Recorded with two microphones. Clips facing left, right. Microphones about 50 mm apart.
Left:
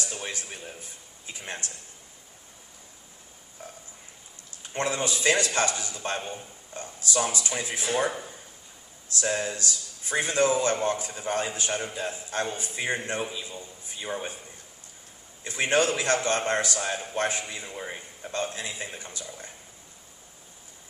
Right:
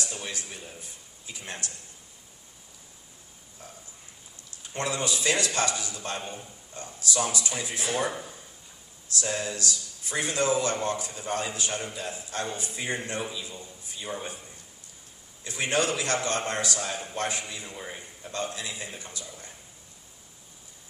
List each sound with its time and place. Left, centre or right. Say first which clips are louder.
0.3 s speech: left 2 dB; left
3.6 s a sound: left 4 dB; left
4.7 s a man's voice: left 2 dB; left
9.1 s a man's voice: left 2 dB; left
15.4 s a man's voice: left 3 dB; left
17.7 s a man's voice: left 3 dB; centre
18.5 s speech: left 1 dB; left